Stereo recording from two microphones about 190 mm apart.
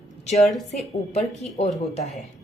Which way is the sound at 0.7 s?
35° left (ahead or behind).